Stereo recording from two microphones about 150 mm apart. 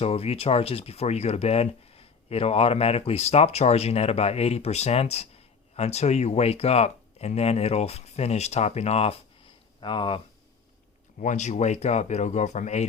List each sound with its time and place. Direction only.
0.0 s speech: 45° left (ahead or behind)
11.2 s speech: 55° left (ahead or behind)